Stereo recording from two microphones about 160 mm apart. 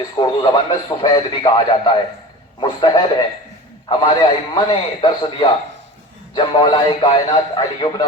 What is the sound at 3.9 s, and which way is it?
A man's voice, 30° left (ahead or behind).